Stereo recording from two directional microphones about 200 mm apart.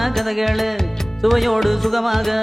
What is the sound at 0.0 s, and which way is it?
Music, centre (ahead or behind).